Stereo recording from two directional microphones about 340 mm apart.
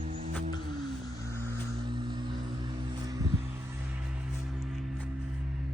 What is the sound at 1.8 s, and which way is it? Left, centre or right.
Vehicle, centre.